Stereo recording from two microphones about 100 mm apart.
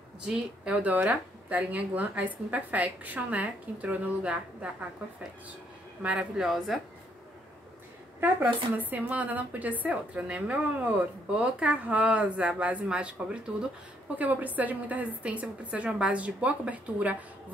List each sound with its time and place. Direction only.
0.2 s a woman's voice: 10° right (ahead or behind)
6.0 s speech: 10° right (ahead or behind)
8.2 s a woman's voice: 15° right (ahead or behind)